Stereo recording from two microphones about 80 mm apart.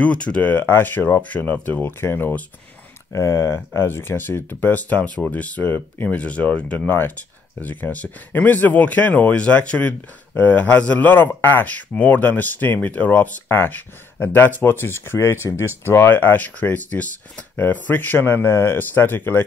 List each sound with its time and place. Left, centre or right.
0.0 s speech: centre
3.1 s speech: left